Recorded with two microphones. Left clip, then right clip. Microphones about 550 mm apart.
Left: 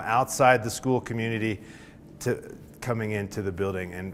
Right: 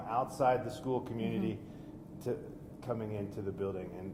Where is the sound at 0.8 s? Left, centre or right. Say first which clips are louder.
Left 9 dB; left.